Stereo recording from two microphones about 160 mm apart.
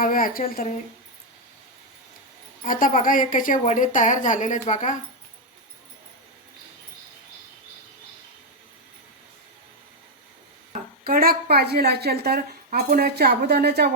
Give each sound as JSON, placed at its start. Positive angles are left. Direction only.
{"t": 0.0, "sound": "speech", "side_deg": 60}
{"t": 2.6, "sound": "a woman's voice", "side_deg": 55}
{"t": 11.0, "sound": "a woman's voice", "side_deg": -65}